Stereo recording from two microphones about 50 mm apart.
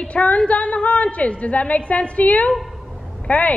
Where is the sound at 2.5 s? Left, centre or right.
Centre.